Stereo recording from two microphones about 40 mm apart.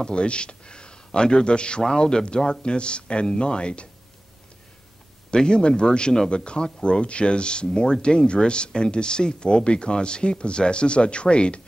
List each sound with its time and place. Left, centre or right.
0.0 s speech: left
5.3 s speech: left